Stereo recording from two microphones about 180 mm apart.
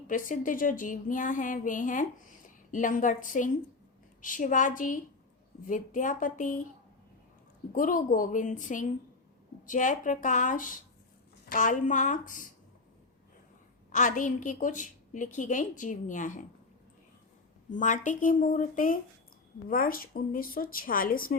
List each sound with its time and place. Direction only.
0.1 s a woman's voice: 45° left (ahead or behind)
7.7 s a woman's voice: 50° left (ahead or behind)
13.9 s a woman's voice: 45° left (ahead or behind)
17.7 s a woman's voice: 45° left (ahead or behind)